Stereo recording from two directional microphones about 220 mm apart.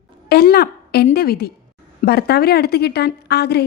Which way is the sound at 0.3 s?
45° left (ahead or behind).